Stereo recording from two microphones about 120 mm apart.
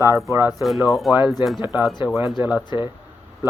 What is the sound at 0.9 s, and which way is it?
Speech, centre (ahead or behind).